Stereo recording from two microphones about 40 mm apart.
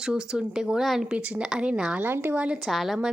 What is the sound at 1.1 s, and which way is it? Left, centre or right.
Speech, right.